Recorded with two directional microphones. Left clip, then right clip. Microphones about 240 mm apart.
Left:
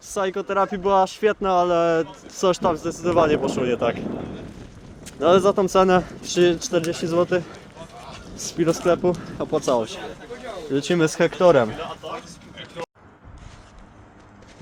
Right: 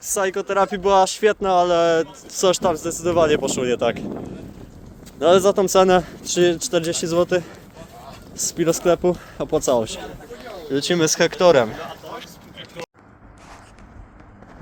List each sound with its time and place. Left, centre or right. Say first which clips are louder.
0.1 s speech: right 2 dB; centre
5.2 s speech: right 2 dB; centre
8.4 s speech: right 2 dB; centre